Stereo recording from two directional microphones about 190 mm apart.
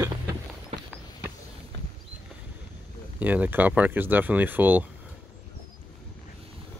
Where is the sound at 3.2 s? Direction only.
10° right (ahead or behind).